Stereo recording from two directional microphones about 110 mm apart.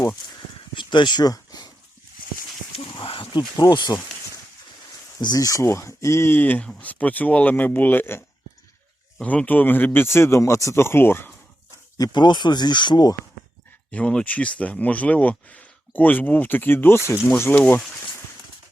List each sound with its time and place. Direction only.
0.3 s a sound: 45° left (ahead or behind)
3.0 s a sound: 50° left (ahead or behind)
3.6 s speech: 40° left (ahead or behind)
5.2 s speech: 35° left (ahead or behind); by 8.2 s 20° left (ahead or behind)
9.2 s speech: 15° left (ahead or behind)
11.9 s speech: 40° left (ahead or behind)
13.9 s speech: 10° left (ahead or behind)